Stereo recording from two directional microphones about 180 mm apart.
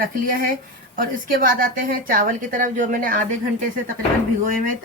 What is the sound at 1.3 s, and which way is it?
A woman's voice, 50° right (ahead or behind).